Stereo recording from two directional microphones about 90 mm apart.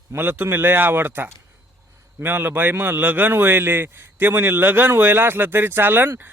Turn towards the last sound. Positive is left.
turn(degrees=-25)  # may be behind; listen again after turning